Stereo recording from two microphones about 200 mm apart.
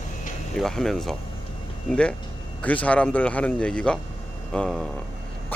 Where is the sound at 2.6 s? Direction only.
5° left (ahead or behind).